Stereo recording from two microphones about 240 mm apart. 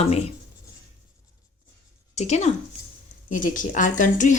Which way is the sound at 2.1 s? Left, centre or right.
Left.